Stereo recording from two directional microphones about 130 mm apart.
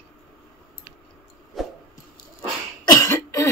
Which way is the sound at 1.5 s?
Centre (ahead or behind).